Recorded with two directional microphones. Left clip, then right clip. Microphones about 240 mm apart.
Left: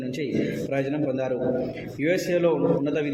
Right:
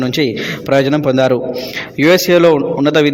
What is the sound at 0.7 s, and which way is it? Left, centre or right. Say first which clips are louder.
A man's voice: right 16 dB; right.